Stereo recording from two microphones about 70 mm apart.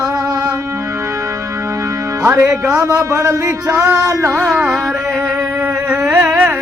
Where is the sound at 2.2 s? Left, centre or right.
Right.